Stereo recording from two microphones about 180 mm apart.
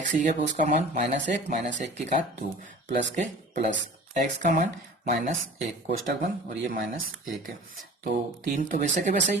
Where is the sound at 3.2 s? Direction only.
40° right (ahead or behind).